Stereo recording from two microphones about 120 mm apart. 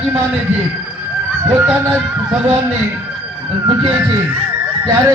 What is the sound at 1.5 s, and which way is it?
Speech, 15° right (ahead or behind).